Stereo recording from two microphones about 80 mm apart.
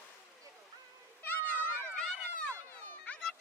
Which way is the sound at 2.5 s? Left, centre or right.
Left.